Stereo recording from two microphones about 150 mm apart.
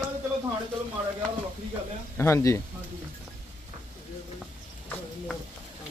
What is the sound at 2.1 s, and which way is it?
Speech, 15° left (ahead or behind).